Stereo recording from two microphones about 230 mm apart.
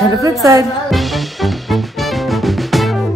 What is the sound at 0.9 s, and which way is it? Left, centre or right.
Music, centre.